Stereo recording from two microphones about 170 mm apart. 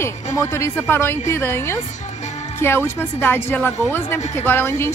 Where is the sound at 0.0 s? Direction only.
15° left (ahead or behind).